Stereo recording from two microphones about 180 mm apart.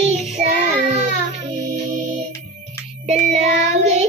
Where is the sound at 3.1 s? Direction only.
40° right (ahead or behind).